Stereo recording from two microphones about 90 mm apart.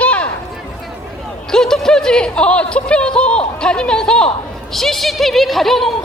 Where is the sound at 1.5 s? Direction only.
5° left (ahead or behind).